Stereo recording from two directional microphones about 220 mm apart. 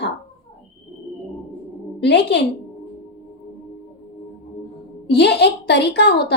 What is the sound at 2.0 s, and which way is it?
Speech, 50° left (ahead or behind).